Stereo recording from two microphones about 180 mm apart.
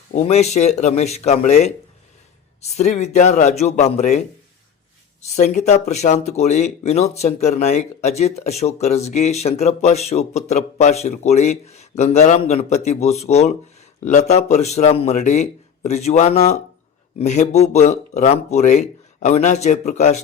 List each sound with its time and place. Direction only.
0.1 s speech: 35° left (ahead or behind)
5.4 s speech: 40° left (ahead or behind)